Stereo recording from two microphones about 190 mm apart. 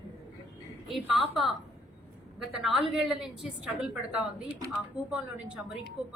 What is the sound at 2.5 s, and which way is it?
A woman's voice, centre (ahead or behind).